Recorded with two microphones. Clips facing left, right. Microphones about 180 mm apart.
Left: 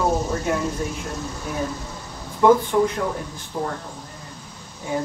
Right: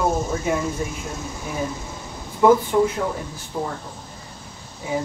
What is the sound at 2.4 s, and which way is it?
Speech, 5° right (ahead or behind).